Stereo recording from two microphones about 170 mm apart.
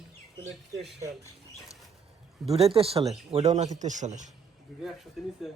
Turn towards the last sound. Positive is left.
turn(degrees=0)  # may be behind; listen again after turning